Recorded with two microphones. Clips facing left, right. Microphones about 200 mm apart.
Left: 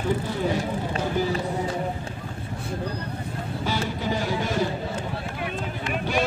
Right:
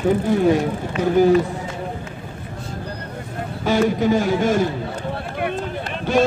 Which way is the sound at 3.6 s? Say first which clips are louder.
Right 11 dB; 50° right (ahead or behind).